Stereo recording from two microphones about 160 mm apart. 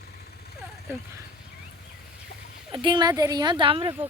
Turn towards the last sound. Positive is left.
turn(degrees=-35)  # may be behind; listen again after turning